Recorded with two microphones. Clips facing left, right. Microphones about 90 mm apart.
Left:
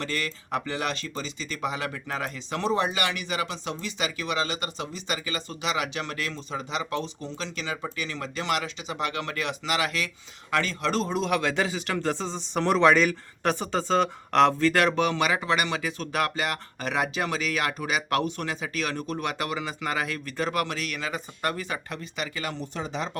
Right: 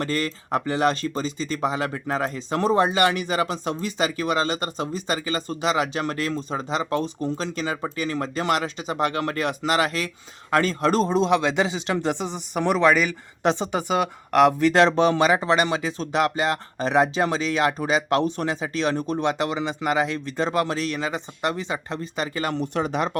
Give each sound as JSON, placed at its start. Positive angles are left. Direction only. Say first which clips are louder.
{"t": 0.0, "sound": "speech", "louder": "right 6 dB", "side_deg": -35}
{"t": 13.4, "sound": "speech", "louder": "right 4 dB", "side_deg": -20}
{"t": 14.7, "sound": "speech", "louder": "right 6 dB", "side_deg": -25}
{"t": 22.4, "sound": "speech", "louder": "right 8 dB", "side_deg": -65}